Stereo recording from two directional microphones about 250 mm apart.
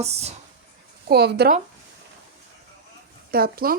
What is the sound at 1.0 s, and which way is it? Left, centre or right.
Speech, right.